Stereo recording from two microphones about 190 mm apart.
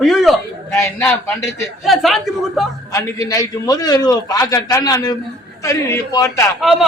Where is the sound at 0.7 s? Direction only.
15° left (ahead or behind).